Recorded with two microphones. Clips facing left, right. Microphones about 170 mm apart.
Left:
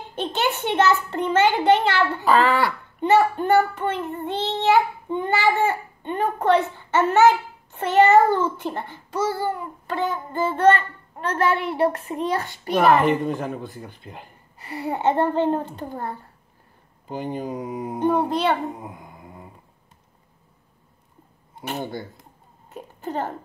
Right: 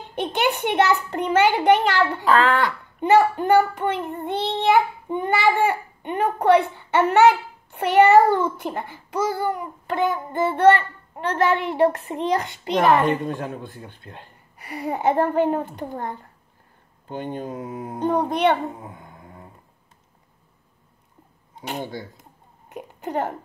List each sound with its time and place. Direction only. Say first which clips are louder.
0.1 s child singing: right 2 dB; 15° right (ahead or behind)
2.2 s speech: left 1 dB; 5° left (ahead or behind)
3.0 s child singing: right 1 dB; 15° right (ahead or behind)
13.3 s speech: left 2 dB; 5° left (ahead or behind)
14.6 s child singing: even; 15° right (ahead or behind)
17.1 s speech: left 1 dB; 5° left (ahead or behind)
18.5 s a sound: right 1 dB; centre (ahead or behind)
22.7 s hiccup: right 1 dB; 15° right (ahead or behind)